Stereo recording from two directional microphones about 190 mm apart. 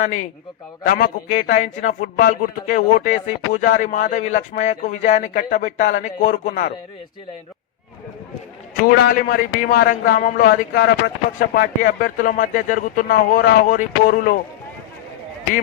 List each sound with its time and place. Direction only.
0.0 s a man's voice: 40° left (ahead or behind)
8.8 s a man's voice: 50° left (ahead or behind)